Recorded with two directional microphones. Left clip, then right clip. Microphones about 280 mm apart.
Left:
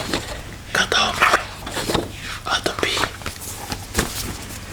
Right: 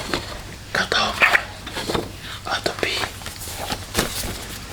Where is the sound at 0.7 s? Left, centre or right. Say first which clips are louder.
Left 2 dB; centre.